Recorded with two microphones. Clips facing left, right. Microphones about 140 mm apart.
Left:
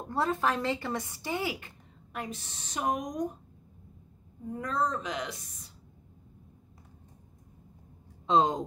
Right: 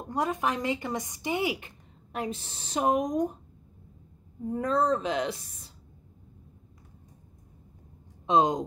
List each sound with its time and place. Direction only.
0.1 s speech: 15° right (ahead or behind)
4.5 s speech: 30° right (ahead or behind)
8.3 s speech: 20° right (ahead or behind)